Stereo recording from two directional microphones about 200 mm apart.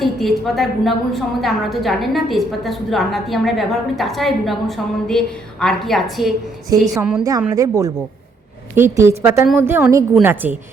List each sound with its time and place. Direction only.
0.0 s a woman's voice: centre (ahead or behind)
7.5 s a woman's voice: 15° right (ahead or behind)